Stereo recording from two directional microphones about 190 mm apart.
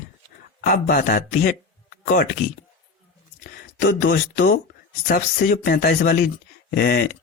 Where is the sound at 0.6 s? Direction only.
50° left (ahead or behind).